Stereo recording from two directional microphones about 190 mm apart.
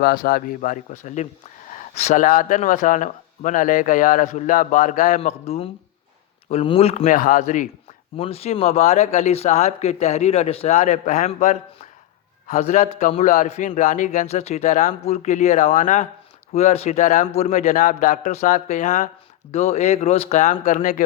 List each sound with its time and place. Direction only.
0.0 s a man's voice: 50° left (ahead or behind)
8.1 s a man's voice: 30° left (ahead or behind)